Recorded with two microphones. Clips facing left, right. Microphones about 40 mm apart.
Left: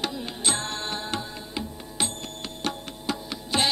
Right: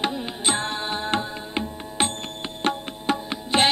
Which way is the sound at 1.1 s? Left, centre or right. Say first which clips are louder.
Right 6 dB; right.